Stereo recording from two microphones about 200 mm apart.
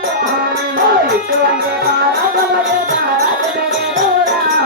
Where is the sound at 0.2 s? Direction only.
50° right (ahead or behind).